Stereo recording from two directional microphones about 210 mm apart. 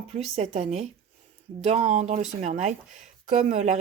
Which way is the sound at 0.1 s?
30° right (ahead or behind).